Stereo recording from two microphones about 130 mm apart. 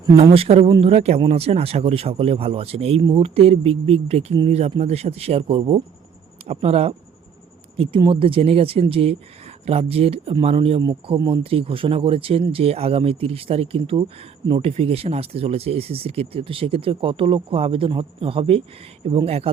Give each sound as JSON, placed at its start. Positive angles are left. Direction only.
{"t": 0.2, "sound": "speech", "side_deg": -45}
{"t": 3.0, "sound": "speech", "side_deg": -35}
{"t": 3.2, "sound": "speech", "side_deg": -45}
{"t": 7.8, "sound": "speech", "side_deg": -40}